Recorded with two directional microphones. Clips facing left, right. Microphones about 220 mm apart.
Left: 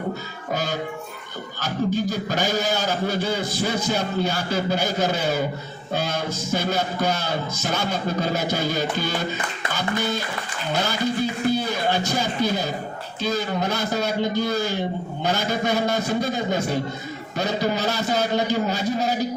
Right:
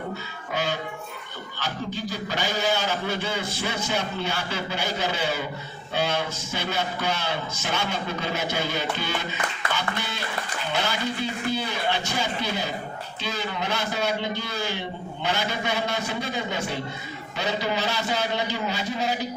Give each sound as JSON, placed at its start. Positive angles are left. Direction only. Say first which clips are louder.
{"t": 0.5, "sound": "a man's voice", "louder": "left 2 dB", "side_deg": 40}